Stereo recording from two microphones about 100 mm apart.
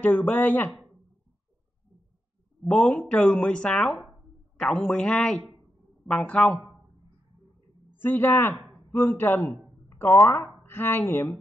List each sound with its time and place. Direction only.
0.0 s speech: 15° left (ahead or behind)
2.7 s speech: 10° left (ahead or behind)
7.9 s speech: 20° left (ahead or behind)